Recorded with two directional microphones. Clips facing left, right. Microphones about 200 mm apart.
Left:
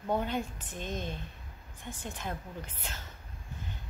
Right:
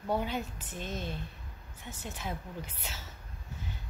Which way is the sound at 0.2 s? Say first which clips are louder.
Left 1 dB; 5° right (ahead or behind).